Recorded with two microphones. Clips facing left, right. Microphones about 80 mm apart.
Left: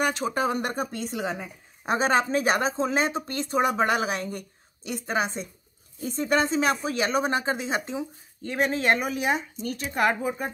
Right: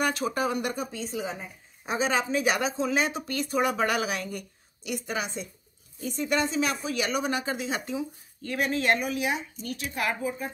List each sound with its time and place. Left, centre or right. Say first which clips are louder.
0.0 s speech: left 2 dB; left
1.1 s speech: left 3 dB; left
1.9 s speech: left 4 dB; left